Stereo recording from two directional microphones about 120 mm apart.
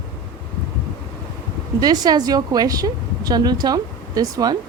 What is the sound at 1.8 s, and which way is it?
A woman's voice, 35° right (ahead or behind).